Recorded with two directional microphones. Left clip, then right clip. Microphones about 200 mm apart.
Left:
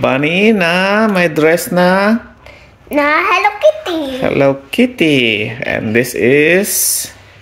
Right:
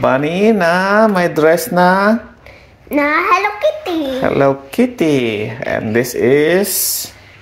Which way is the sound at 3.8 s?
15° left (ahead or behind).